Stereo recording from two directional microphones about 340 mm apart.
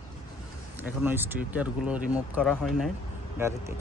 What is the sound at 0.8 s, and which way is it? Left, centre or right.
Speech, centre.